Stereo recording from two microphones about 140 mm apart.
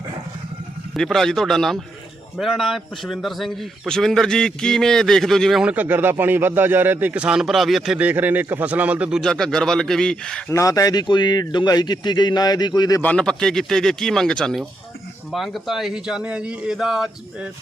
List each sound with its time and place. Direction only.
0.9 s a man's voice: centre (ahead or behind)
10.5 s a man's voice: 25° left (ahead or behind)
13.0 s a man's voice: 10° left (ahead or behind)